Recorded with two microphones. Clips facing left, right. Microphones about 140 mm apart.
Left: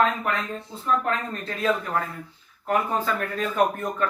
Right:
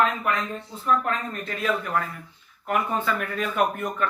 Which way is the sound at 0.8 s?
35° left (ahead or behind).